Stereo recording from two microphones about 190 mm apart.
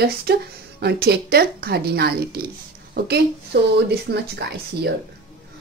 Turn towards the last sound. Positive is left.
turn(degrees=-60)  # may be behind; listen again after turning